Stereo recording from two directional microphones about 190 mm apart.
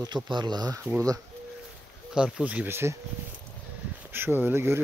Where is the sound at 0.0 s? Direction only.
25° right (ahead or behind).